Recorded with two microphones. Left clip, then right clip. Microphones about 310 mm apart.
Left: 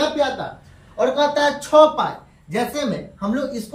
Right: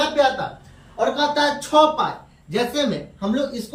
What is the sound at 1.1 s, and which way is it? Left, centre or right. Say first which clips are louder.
Speech: left 2 dB; centre.